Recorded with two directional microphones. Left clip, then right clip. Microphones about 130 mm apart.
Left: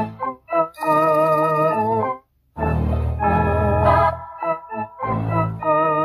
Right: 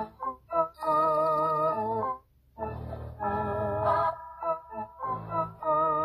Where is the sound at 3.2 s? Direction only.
30° left (ahead or behind).